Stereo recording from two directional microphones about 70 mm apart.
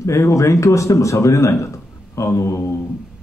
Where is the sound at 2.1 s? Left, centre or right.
Left.